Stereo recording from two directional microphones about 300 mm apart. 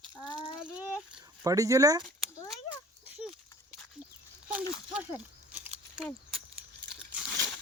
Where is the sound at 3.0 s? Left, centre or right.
Centre.